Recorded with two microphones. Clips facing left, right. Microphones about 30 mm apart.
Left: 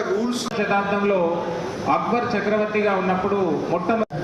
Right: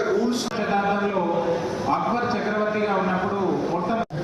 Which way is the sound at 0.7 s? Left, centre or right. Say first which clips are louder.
Left 2 dB; centre.